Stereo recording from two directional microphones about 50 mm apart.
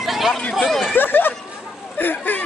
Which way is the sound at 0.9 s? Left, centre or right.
Left.